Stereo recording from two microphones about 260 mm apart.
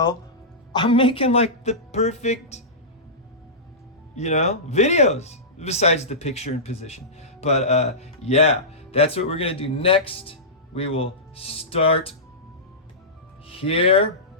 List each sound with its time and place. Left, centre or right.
0.7 s speech: centre
4.1 s speech: left
13.5 s speech: left